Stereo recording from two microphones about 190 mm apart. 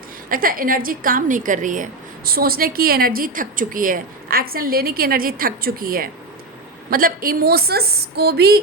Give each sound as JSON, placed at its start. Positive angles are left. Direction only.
{"t": 0.3, "sound": "a woman's voice", "side_deg": -50}